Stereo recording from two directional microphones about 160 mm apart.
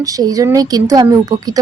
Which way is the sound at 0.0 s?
20° right (ahead or behind).